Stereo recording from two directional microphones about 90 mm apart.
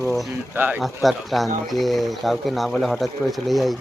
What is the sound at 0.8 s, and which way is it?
Speech, centre (ahead or behind).